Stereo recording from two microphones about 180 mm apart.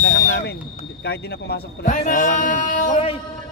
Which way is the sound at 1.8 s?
45° left (ahead or behind).